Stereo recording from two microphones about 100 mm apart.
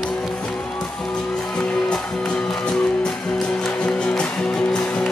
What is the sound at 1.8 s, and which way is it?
Music, 10° left (ahead or behind).